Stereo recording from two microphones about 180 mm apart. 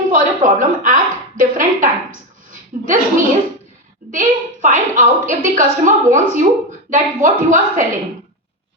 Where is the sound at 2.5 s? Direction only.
45° right (ahead or behind).